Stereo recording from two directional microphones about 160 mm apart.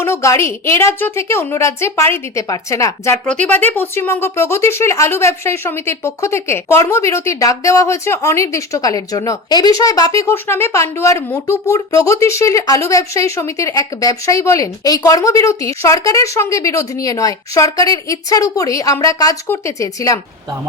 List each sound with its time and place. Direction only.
0.0 s a woman's voice: 15° left (ahead or behind)